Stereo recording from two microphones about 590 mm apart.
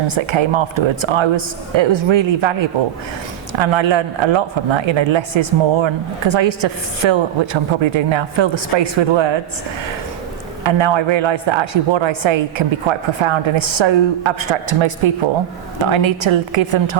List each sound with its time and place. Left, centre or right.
0.1 s speech: right
3.6 s speech: right
10.6 s speech: right